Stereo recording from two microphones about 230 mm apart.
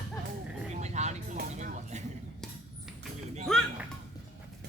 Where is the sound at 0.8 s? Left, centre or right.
Right.